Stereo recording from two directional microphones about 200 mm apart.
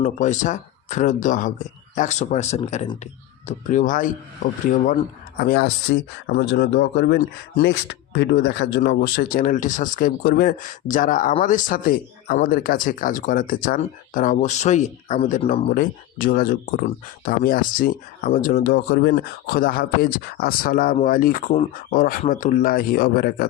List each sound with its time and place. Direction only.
0.0 s speech: 35° left (ahead or behind)
5.4 s speech: 50° left (ahead or behind); by 15.6 s 35° left (ahead or behind)
15.7 s speech: 45° left (ahead or behind)